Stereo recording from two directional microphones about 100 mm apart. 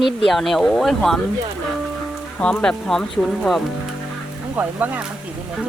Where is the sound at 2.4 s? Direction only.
10° left (ahead or behind).